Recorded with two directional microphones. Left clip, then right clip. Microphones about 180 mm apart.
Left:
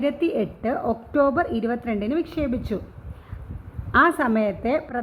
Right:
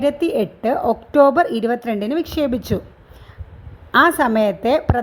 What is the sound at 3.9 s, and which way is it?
A woman's voice, 45° right (ahead or behind).